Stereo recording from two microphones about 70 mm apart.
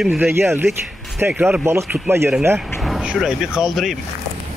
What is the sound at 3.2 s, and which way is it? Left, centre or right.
Speech, centre.